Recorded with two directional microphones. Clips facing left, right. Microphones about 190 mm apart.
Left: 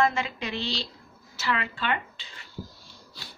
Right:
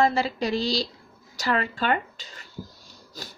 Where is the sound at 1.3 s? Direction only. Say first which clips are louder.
Right 4 dB; 40° right (ahead or behind).